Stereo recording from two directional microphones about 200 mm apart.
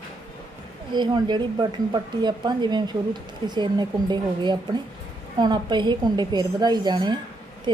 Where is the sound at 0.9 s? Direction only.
25° right (ahead or behind).